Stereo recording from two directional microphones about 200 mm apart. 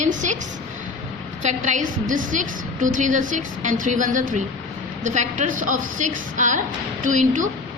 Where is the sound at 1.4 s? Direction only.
35° right (ahead or behind).